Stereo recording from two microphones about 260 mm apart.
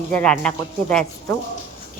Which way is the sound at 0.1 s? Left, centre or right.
Centre.